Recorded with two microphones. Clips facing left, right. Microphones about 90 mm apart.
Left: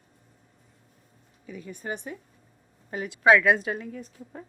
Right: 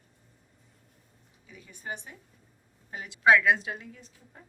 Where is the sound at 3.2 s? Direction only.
90° left.